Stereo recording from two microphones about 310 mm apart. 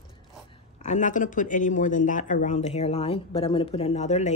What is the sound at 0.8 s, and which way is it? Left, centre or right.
A woman's voice, left.